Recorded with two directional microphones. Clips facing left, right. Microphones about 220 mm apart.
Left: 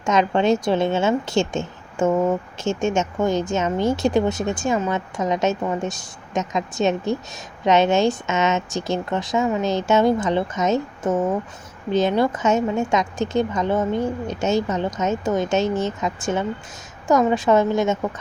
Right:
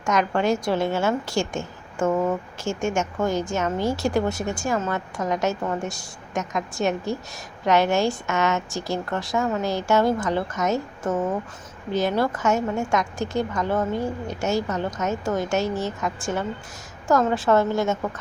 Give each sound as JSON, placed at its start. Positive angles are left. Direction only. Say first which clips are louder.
{"t": 0.0, "sound": "a woman's voice", "louder": "left 3 dB", "side_deg": 20}